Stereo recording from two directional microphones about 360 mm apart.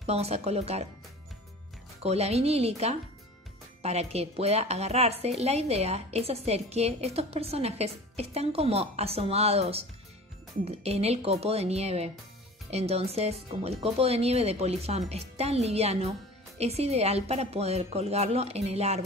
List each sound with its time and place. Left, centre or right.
0.0 s a woman's voice: centre
2.0 s a woman's voice: centre